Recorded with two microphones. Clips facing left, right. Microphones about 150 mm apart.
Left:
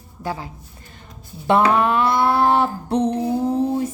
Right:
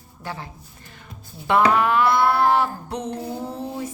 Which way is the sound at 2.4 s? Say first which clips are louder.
Left 2 dB; 30° left (ahead or behind).